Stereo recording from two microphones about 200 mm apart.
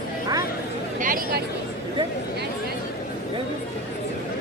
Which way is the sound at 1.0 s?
45° right (ahead or behind).